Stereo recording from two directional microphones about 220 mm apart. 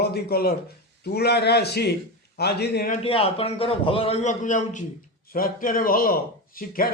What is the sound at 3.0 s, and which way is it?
A man's voice, 25° left (ahead or behind).